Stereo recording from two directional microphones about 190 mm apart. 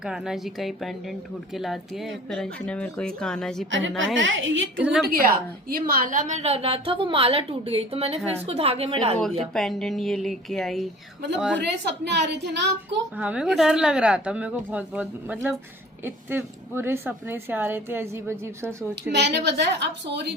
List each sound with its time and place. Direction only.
0.0 s speech: centre (ahead or behind)
3.7 s a woman's voice: 80° right
4.8 s speech: 5° right (ahead or behind)
5.0 s a woman's voice: 50° right (ahead or behind); by 9.1 s 30° right (ahead or behind)
9.6 s speech: centre (ahead or behind)
11.9 s a woman's voice: 65° right (ahead or behind)
13.1 s speech: 5° right (ahead or behind)
19.1 s a woman's voice: 65° right (ahead or behind)